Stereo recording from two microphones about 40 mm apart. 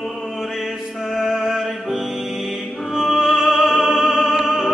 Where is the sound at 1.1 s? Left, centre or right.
Centre.